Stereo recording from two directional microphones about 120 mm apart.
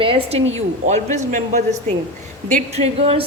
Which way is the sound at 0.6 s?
75° right (ahead or behind).